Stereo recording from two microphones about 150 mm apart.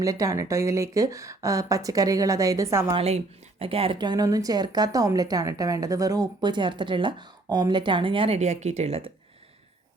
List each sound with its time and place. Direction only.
0.0 s a woman's voice: 20° right (ahead or behind)
2.9 s a woman's voice: 45° right (ahead or behind)